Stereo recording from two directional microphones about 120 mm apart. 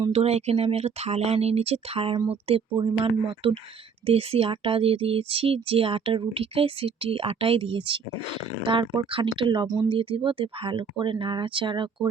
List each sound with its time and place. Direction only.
0.1 s speech: 60° right (ahead or behind); by 9.9 s 30° right (ahead or behind)
9.9 s speech: 45° right (ahead or behind)